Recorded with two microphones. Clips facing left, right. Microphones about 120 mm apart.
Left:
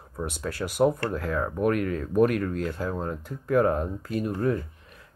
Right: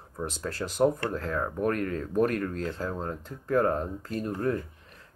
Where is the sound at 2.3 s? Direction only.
35° right (ahead or behind).